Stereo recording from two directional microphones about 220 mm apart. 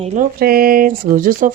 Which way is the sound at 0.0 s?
35° right (ahead or behind).